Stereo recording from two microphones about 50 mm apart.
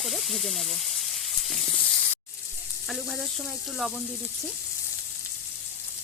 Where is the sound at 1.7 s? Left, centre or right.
Left.